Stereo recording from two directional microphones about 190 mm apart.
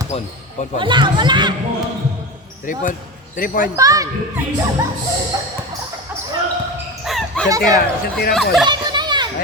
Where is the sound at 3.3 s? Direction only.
45° left (ahead or behind).